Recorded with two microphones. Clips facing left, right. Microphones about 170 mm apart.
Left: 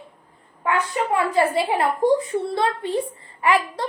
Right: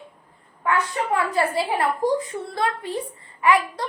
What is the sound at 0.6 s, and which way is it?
A woman's voice, 20° left (ahead or behind).